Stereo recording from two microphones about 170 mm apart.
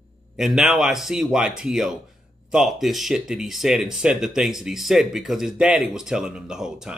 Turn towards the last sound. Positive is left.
turn(degrees=-5)  # may be behind; listen again after turning